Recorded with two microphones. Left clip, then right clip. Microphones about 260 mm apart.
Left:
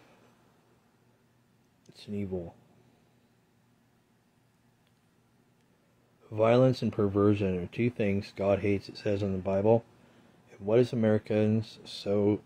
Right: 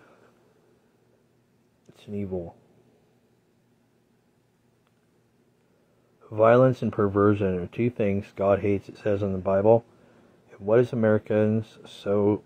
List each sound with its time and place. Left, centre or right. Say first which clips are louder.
2.0 s speech: right 4 dB; centre
6.2 s speech: right 6 dB; centre